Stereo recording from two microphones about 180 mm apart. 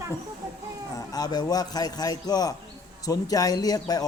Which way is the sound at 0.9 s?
20° left (ahead or behind).